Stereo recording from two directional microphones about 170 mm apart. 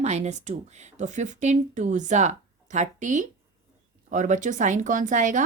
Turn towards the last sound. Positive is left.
turn(degrees=-45)  # may be behind; listen again after turning